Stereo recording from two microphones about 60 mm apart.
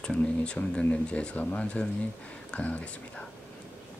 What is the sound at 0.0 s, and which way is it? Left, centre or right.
Speech, centre.